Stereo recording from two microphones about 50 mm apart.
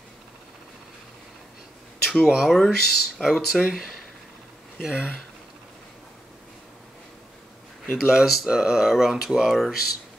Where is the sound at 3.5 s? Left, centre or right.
Centre.